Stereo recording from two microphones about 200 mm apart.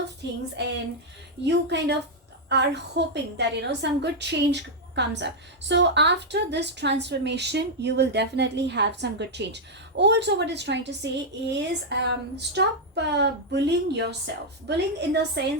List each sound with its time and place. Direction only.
0.2 s a woman's voice: 60° right (ahead or behind)
1.5 s a woman's voice: 60° right (ahead or behind)